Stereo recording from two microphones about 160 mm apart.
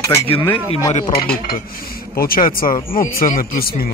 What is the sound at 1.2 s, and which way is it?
Speech, 70° left (ahead or behind).